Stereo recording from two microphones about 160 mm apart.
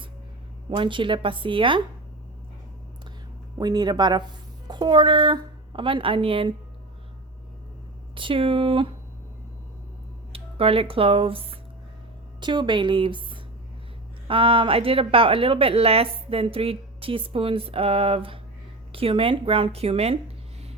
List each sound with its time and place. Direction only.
0.8 s a woman's voice: 30° right (ahead or behind)
3.6 s a woman's voice: 25° right (ahead or behind)
8.1 s speech: 35° right (ahead or behind)
10.3 s a woman's voice: 35° right (ahead or behind)